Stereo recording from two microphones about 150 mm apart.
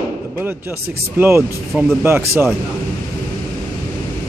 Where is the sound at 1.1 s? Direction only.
15° right (ahead or behind).